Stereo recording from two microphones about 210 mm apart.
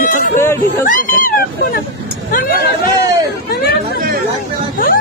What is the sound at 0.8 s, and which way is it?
Speech, 40° left (ahead or behind).